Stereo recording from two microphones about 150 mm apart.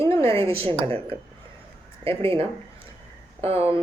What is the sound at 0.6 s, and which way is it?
Speech, 40° right (ahead or behind).